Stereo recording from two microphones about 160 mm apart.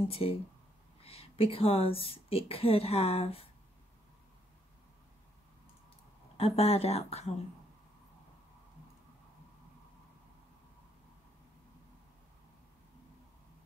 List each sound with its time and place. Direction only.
0.1 s speech: 35° left (ahead or behind)
6.3 s speech: 40° left (ahead or behind)